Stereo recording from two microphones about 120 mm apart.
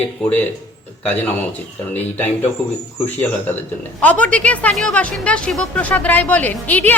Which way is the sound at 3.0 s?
15° left (ahead or behind).